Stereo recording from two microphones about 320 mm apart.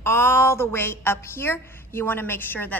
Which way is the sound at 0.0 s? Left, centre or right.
Centre.